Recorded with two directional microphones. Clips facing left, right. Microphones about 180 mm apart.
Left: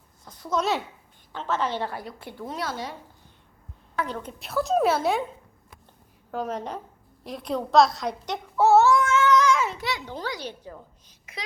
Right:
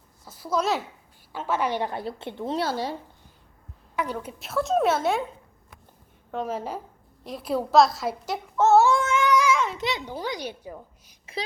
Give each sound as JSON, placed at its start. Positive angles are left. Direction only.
{"t": 0.3, "sound": "a woman's voice", "side_deg": -5}
{"t": 2.0, "sound": "speech", "side_deg": -25}
{"t": 3.9, "sound": "a woman's voice", "side_deg": -10}
{"t": 6.3, "sound": "a woman's voice", "side_deg": 0}
{"t": 9.0, "sound": "a sound", "side_deg": -15}
{"t": 9.7, "sound": "a child's voice", "side_deg": -20}
{"t": 11.3, "sound": "speech", "side_deg": -30}